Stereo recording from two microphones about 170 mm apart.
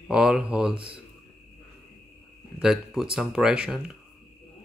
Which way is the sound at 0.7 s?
30° right (ahead or behind).